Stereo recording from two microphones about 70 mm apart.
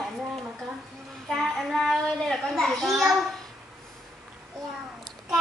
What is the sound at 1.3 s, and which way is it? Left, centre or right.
Child singing, centre.